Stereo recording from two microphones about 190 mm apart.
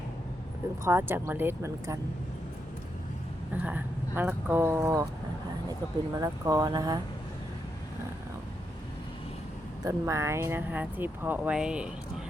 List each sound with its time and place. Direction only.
0.9 s speech: 10° right (ahead or behind)
3.5 s speech: 10° right (ahead or behind)
6.1 s speech: 15° right (ahead or behind)
9.8 s speech: 15° right (ahead or behind)